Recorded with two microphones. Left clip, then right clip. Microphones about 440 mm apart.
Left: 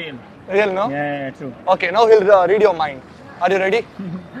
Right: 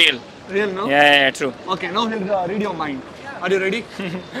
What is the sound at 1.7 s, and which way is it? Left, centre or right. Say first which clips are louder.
Speech: left 9 dB; left.